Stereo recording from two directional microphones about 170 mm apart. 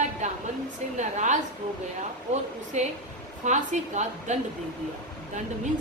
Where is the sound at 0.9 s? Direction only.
45° right (ahead or behind).